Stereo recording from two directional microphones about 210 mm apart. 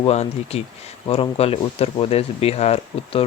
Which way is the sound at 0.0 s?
30° left (ahead or behind).